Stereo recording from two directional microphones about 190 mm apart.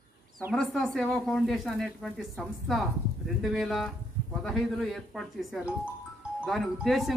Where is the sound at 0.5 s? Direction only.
Centre (ahead or behind).